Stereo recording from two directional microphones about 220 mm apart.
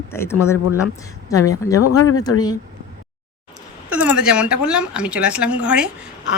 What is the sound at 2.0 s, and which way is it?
Speech, 85° left.